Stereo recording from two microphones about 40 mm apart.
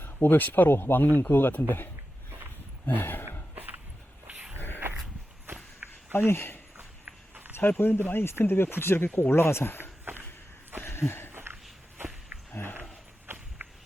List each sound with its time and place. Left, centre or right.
0.0 s speech: left
0.7 s speech: left
1.0 s a man's voice: left
1.3 s speech: left
3.0 s speech: left
3.5 s a sound: right
4.5 s a sound: left
6.1 s speech: left
6.7 s a sound: right
7.5 s speech: left
8.1 s speech: left
9.3 s speech: left
10.8 s a sound: left
13.6 s walk: right